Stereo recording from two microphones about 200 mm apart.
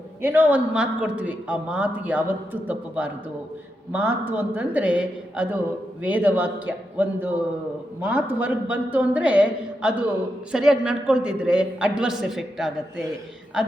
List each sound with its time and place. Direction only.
0.2 s a man's voice: 10° right (ahead or behind)